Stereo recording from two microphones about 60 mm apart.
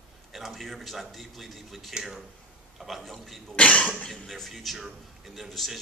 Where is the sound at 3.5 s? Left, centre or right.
Left.